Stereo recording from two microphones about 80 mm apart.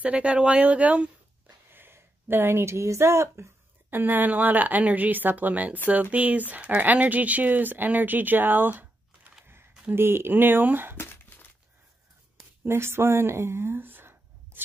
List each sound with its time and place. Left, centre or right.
0.0 s speech: centre
1.7 s speech: right
3.9 s speech: right
11.0 s a sound: left
12.6 s speech: right